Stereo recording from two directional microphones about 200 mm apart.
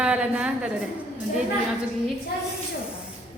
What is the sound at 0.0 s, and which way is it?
Speech, 5° right (ahead or behind).